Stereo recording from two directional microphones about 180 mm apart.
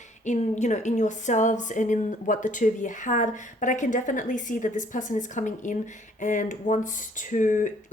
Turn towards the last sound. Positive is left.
turn(degrees=45)  # may be behind; listen again after turning